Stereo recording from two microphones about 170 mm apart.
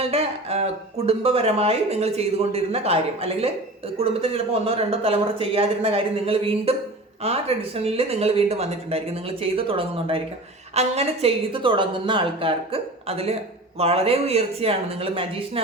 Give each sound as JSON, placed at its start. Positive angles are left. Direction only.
{"t": 0.0, "sound": "a woman's voice", "side_deg": -35}